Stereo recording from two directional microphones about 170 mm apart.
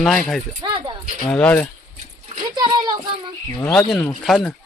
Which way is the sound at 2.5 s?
25° right (ahead or behind).